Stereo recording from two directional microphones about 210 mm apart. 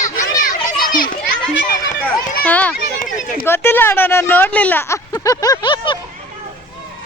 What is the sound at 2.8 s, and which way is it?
Speech, 40° left (ahead or behind).